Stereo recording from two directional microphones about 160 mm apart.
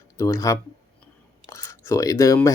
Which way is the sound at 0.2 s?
20° left (ahead or behind).